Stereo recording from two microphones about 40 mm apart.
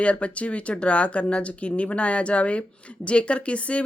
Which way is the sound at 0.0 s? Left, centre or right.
Left.